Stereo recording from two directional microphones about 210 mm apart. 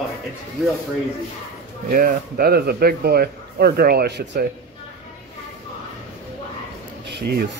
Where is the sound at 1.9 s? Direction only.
45° right (ahead or behind).